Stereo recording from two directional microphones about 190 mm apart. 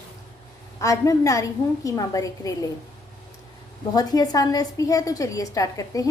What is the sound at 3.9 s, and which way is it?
A woman's voice, 20° left (ahead or behind).